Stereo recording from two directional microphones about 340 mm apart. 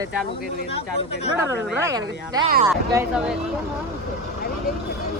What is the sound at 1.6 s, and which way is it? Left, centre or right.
Speech, centre.